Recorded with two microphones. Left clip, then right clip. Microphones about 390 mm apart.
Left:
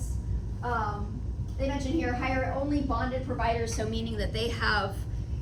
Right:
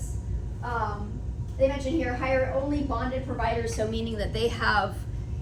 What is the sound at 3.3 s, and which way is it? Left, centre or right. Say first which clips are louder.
A woman's voice: right 2 dB; centre.